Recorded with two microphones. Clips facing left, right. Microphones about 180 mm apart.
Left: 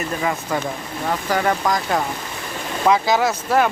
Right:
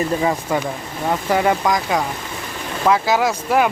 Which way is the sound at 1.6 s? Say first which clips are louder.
Right 1 dB; centre (ahead or behind).